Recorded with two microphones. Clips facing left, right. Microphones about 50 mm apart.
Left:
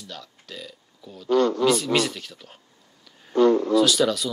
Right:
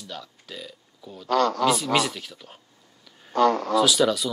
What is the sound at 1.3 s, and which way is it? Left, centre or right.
Speech, right.